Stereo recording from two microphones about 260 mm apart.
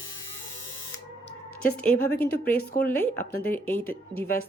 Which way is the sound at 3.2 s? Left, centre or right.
Left.